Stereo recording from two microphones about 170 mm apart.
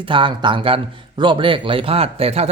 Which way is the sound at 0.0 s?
30° right (ahead or behind).